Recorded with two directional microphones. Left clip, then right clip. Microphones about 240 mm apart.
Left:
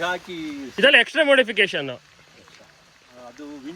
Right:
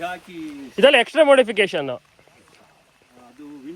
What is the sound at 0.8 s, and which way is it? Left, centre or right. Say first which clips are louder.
Speech: right 2 dB; centre.